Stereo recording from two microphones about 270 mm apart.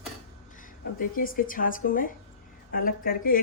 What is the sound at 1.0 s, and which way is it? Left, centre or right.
Speech, left.